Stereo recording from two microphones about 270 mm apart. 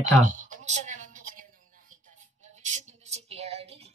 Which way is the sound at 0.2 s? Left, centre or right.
Right.